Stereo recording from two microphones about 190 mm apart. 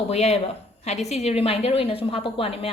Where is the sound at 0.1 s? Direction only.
35° left (ahead or behind).